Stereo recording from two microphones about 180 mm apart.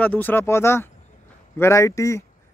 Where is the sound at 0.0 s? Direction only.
10° left (ahead or behind).